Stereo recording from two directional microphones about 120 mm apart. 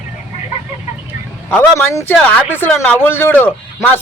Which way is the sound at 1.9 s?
25° left (ahead or behind).